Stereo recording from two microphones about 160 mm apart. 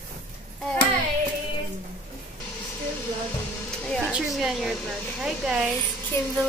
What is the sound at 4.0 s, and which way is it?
Speech, 5° right (ahead or behind).